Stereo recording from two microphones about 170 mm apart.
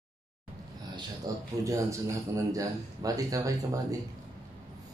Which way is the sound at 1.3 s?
20° right (ahead or behind).